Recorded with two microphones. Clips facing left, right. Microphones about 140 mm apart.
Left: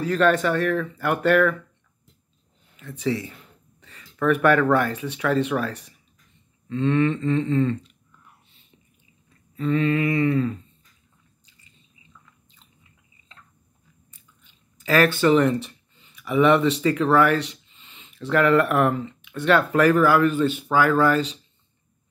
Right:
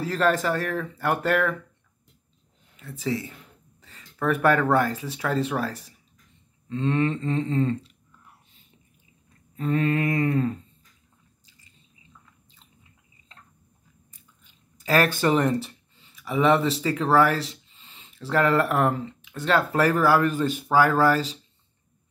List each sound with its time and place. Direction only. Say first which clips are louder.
0.0 s speech: left 3 dB; 30° right (ahead or behind)
3.0 s speech: left 3 dB; 30° right (ahead or behind)
9.6 s mantra: left 2 dB; 45° right (ahead or behind)
14.1 s speech: even; 40° right (ahead or behind)